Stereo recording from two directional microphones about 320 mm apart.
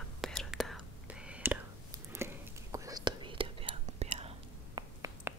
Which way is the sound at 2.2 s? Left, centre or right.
Centre.